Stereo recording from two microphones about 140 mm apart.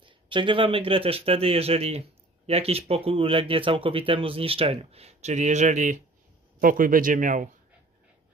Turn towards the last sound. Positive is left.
turn(degrees=-70)  # may be behind; listen again after turning